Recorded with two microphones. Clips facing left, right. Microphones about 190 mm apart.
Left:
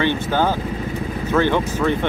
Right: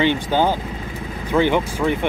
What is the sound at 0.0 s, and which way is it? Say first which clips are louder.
Speech: right 1 dB; 15° right (ahead or behind).